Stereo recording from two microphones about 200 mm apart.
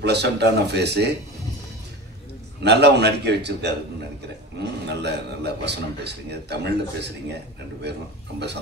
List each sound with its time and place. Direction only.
0.0 s a man's voice: 55° right (ahead or behind)
2.6 s a man's voice: 55° right (ahead or behind)